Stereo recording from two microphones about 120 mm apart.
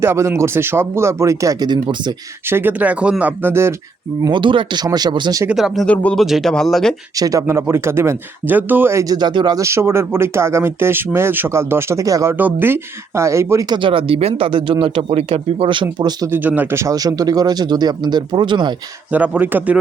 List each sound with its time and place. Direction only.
0.0 s speech: 20° right (ahead or behind); by 2.1 s 40° right (ahead or behind)
2.5 s speech: 15° right (ahead or behind)
4.2 s a man's voice: 40° right (ahead or behind)
5.5 s speech: 5° right (ahead or behind)
5.8 s speech: 10° left (ahead or behind)
6.2 s speech: centre (ahead or behind)
7.2 s speech: 30° right (ahead or behind)
9.1 s a man's voice: 40° right (ahead or behind)
9.6 s speech: 20° right (ahead or behind)
13.7 s speech: 45° right (ahead or behind)
16.3 s a man's voice: 15° right (ahead or behind); by 18.7 s 40° right (ahead or behind)
19.1 s speech: 15° right (ahead or behind)